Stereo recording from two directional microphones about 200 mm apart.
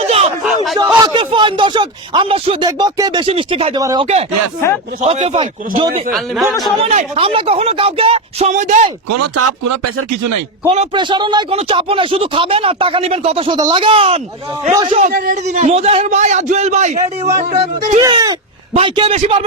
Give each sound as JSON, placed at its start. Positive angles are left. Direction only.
{"t": 0.0, "sound": "a sound", "side_deg": -30}
{"t": 0.4, "sound": "a sound", "side_deg": 0}
{"t": 1.0, "sound": "a man's voice", "side_deg": -25}
{"t": 3.8, "sound": "speech", "side_deg": -15}
{"t": 4.0, "sound": "a man's voice", "side_deg": -30}
{"t": 4.6, "sound": "speech", "side_deg": 15}
{"t": 4.9, "sound": "a man's voice", "side_deg": -35}
{"t": 6.1, "sound": "speech", "side_deg": 0}
{"t": 6.8, "sound": "a man's voice", "side_deg": -30}
{"t": 10.7, "sound": "a man's voice", "side_deg": -30}
{"t": 15.1, "sound": "a man's voice", "side_deg": -45}
{"t": 18.0, "sound": "a man's voice", "side_deg": -15}